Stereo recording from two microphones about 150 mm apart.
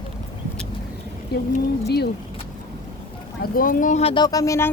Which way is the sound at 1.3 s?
90° left.